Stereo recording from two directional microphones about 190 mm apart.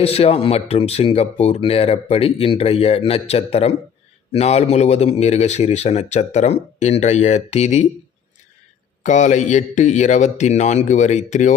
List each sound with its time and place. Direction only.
0.0 s speech: 30° left (ahead or behind)
9.0 s speech: 40° left (ahead or behind)